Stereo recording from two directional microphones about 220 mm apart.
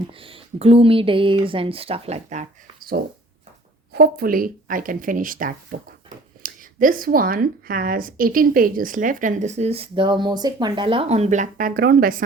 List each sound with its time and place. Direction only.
0.1 s speech: 25° right (ahead or behind); by 12.2 s 40° right (ahead or behind)